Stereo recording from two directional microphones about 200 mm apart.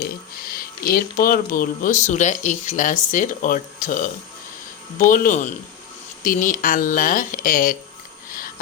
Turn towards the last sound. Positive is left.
turn(degrees=45)  # may be behind; listen again after turning